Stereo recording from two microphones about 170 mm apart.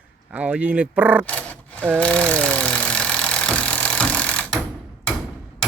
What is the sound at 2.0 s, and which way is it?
Vehicle, 5° left (ahead or behind).